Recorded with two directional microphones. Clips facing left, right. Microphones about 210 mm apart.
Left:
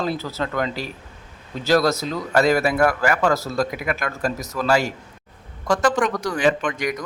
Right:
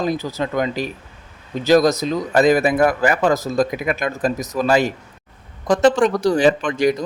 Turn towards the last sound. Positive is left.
turn(degrees=-30)  # may be behind; listen again after turning